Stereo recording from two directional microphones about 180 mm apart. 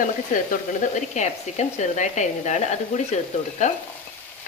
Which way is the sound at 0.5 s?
40° left (ahead or behind).